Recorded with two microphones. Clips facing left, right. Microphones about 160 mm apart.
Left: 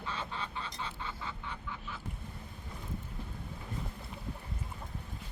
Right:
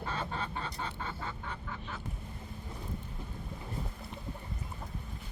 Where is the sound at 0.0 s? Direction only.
45° right (ahead or behind).